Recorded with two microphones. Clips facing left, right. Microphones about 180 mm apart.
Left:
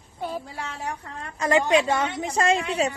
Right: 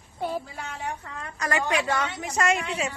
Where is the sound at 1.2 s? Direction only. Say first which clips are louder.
Left 6 dB; 25° left (ahead or behind).